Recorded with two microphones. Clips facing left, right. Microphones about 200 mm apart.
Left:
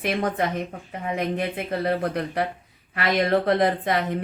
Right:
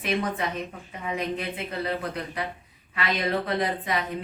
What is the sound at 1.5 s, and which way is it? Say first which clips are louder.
A woman's voice: left 5 dB; 50° left (ahead or behind).